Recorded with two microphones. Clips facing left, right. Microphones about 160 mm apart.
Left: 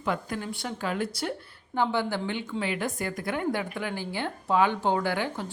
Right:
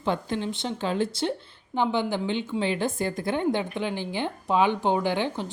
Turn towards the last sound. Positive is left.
turn(degrees=-20)  # may be behind; listen again after turning